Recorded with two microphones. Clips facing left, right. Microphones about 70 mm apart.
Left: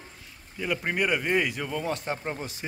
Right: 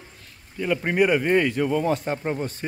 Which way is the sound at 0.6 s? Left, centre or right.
Centre.